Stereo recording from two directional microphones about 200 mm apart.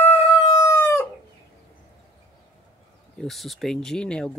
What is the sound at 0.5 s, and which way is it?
Chicken, 15° left (ahead or behind).